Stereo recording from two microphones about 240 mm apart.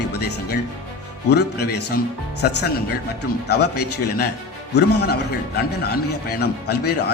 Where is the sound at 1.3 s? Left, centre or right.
Left.